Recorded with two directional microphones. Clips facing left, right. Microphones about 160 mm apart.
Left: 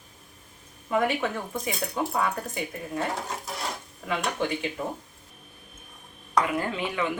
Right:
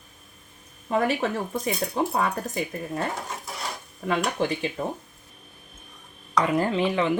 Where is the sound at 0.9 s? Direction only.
30° right (ahead or behind).